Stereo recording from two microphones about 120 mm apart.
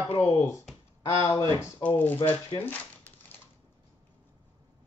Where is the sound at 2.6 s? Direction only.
15° left (ahead or behind).